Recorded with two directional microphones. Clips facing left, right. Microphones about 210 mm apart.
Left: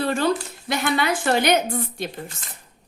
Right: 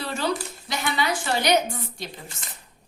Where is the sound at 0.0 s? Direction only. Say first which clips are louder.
Left 7 dB; 55° left (ahead or behind).